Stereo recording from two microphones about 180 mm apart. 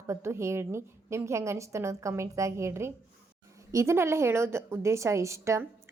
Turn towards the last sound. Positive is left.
turn(degrees=-15)  # may be behind; listen again after turning